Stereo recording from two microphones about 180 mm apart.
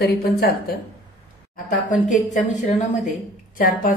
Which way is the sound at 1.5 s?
45° left (ahead or behind).